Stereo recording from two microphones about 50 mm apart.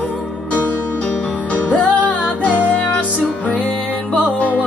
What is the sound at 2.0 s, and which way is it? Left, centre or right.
Music, left.